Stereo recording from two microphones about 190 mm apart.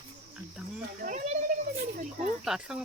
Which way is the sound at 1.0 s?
40° right (ahead or behind).